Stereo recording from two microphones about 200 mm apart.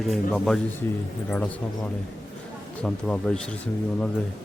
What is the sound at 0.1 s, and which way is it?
Speech, centre (ahead or behind).